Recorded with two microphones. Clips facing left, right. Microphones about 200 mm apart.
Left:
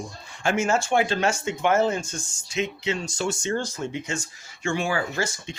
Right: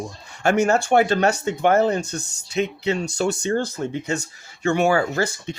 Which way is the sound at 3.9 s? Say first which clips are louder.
Right 5 dB; 40° right (ahead or behind).